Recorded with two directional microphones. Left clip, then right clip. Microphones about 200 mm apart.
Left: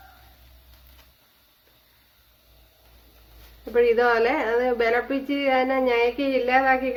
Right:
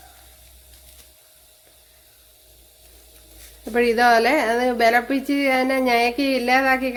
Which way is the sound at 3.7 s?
50° right (ahead or behind).